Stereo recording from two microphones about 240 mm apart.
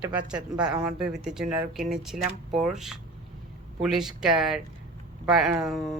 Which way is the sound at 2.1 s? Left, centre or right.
Right.